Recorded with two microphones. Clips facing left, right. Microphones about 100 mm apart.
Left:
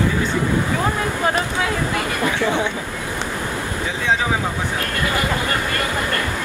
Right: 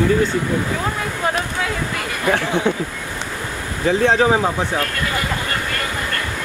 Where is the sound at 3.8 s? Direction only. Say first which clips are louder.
Right 8 dB; 45° right (ahead or behind).